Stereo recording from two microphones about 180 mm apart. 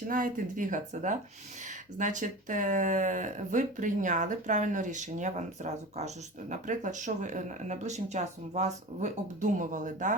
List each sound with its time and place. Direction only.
0.1 s speech: 50° right (ahead or behind)